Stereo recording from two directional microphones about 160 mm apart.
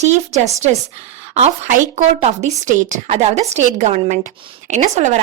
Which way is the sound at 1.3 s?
45° right (ahead or behind).